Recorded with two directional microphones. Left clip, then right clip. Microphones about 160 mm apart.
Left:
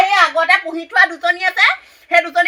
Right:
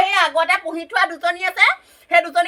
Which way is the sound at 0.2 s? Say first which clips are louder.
Left 4 dB; 40° right (ahead or behind).